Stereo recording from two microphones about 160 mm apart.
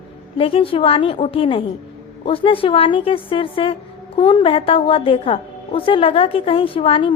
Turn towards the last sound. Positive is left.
turn(degrees=35)  # may be behind; listen again after turning